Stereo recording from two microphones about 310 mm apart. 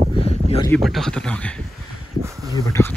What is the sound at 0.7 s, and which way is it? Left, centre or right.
Speech, centre.